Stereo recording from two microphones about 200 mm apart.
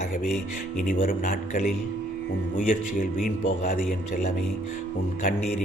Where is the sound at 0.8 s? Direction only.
45° left (ahead or behind).